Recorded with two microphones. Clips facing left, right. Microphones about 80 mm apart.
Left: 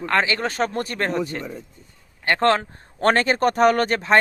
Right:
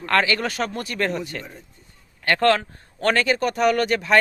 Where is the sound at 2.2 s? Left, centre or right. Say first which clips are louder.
Even; left.